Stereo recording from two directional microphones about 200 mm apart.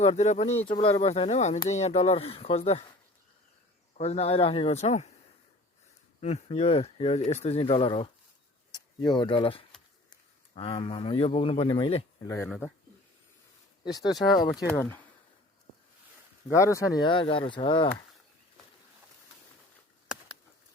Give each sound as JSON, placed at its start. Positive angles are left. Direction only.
{"t": 0.0, "sound": "speech", "side_deg": 30}
{"t": 3.9, "sound": "speech", "side_deg": 30}
{"t": 6.1, "sound": "speech", "side_deg": 30}
{"t": 12.3, "sound": "speech", "side_deg": 10}
{"t": 13.8, "sound": "speech", "side_deg": 20}
{"t": 16.6, "sound": "speech", "side_deg": 15}